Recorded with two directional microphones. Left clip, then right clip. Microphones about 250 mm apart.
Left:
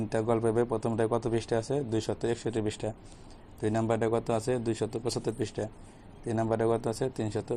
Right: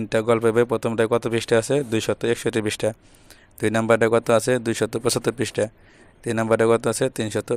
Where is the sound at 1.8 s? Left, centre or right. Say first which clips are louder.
Right 9 dB; right.